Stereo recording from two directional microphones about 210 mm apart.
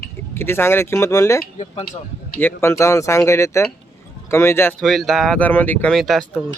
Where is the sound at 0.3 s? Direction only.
10° left (ahead or behind).